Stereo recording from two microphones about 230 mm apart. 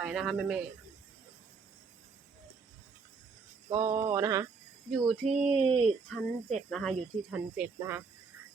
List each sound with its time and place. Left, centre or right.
0.0 s speech: centre
3.7 s mantra: centre
4.9 s speech: centre
5.3 s speech: right
6.1 s speech: centre